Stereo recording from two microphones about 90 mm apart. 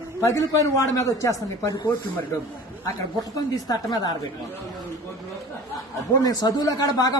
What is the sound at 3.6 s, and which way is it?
Speech, 45° left (ahead or behind).